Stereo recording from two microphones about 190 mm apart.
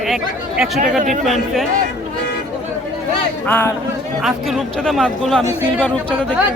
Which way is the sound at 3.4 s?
10° left (ahead or behind).